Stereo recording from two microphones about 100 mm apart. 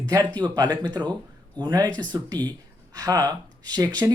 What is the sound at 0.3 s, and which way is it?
Speech, 45° right (ahead or behind).